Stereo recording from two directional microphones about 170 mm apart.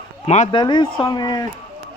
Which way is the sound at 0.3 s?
40° left (ahead or behind).